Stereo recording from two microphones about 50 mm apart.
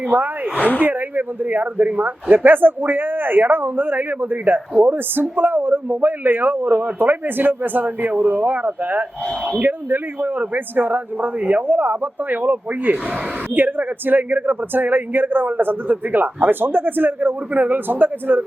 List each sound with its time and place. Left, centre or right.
0.1 s speech: right